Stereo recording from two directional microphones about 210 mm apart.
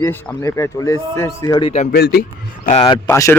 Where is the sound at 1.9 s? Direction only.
50° left (ahead or behind).